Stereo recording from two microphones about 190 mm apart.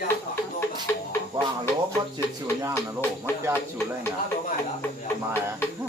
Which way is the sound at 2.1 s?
15° right (ahead or behind).